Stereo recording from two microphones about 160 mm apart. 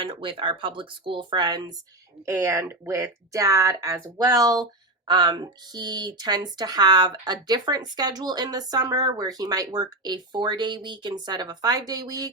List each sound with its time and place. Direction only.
0.0 s speech: 35° right (ahead or behind)